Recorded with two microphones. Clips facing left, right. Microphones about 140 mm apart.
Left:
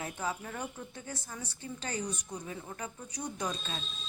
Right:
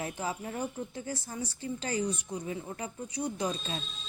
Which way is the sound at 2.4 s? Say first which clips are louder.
Right 4 dB; 25° right (ahead or behind).